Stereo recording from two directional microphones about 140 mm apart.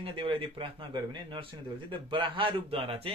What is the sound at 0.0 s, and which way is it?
Speech, 40° right (ahead or behind).